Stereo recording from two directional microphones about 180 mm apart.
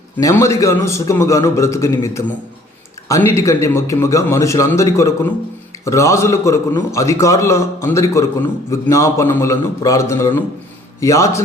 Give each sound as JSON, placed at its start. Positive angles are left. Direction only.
{"t": 0.2, "sound": "a man's voice", "side_deg": 15}